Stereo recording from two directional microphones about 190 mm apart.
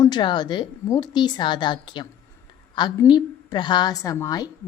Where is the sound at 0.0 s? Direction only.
25° left (ahead or behind).